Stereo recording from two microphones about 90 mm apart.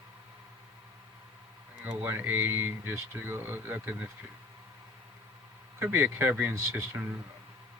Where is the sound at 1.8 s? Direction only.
25° right (ahead or behind).